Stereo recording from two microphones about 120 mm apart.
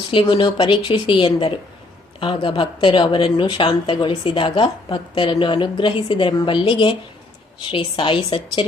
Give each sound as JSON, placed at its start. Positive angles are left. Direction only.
{"t": 0.1, "sound": "speech", "side_deg": 45}